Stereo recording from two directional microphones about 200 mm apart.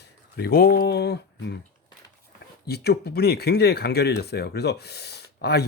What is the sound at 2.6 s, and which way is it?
Speech, 55° left (ahead or behind).